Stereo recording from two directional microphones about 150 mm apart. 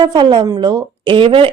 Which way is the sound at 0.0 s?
30° right (ahead or behind).